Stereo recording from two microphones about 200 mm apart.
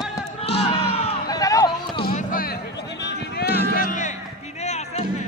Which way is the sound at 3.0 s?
55° left (ahead or behind).